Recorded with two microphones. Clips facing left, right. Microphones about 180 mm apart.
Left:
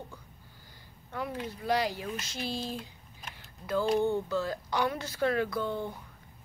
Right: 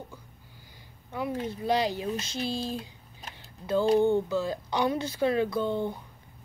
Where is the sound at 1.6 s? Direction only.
20° right (ahead or behind).